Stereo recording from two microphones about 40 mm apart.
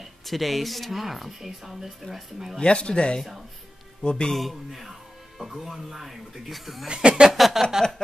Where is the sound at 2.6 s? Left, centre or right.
Left.